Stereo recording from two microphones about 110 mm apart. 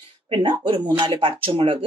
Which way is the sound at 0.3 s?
50° right (ahead or behind).